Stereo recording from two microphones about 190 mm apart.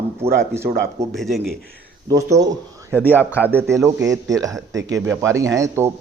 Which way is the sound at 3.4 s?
15° right (ahead or behind).